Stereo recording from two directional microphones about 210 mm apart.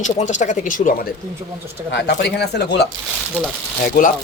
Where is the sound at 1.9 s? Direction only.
55° left (ahead or behind).